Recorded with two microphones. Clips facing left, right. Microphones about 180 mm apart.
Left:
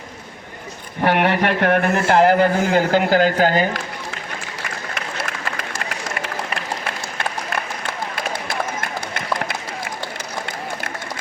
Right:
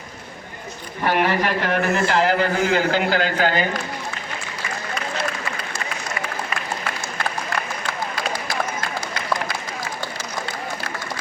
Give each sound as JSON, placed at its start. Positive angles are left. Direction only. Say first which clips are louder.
{"t": 1.0, "sound": "a man's voice", "louder": "left 3 dB", "side_deg": 60}